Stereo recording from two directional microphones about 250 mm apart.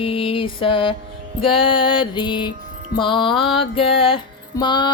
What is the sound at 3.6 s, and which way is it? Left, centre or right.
Music, left.